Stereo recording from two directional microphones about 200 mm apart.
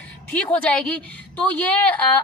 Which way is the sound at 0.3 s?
5° left (ahead or behind).